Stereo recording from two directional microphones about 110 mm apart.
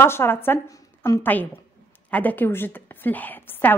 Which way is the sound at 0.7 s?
30° left (ahead or behind).